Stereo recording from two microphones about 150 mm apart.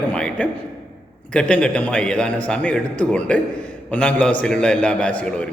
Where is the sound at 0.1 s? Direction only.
5° left (ahead or behind).